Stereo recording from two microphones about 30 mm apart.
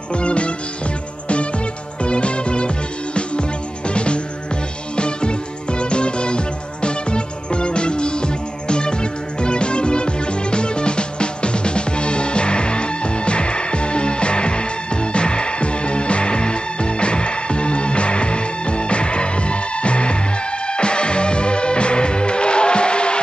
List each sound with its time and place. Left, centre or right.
0.1 s music: left
2.0 s music: left